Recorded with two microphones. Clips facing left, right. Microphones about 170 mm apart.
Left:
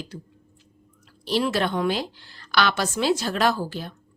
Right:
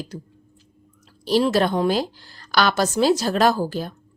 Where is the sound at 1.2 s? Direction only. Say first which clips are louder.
Right 5 dB; 40° right (ahead or behind).